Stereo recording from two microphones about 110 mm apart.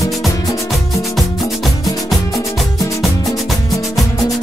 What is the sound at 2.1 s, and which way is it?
Music, centre (ahead or behind).